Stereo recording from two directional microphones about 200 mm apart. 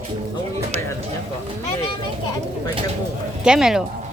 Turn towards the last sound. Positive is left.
turn(degrees=-5)  # may be behind; listen again after turning